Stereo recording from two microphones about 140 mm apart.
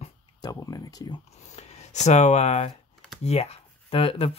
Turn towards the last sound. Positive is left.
turn(degrees=40)  # may be behind; listen again after turning